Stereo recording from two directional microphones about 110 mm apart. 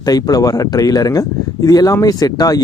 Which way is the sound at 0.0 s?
35° left (ahead or behind).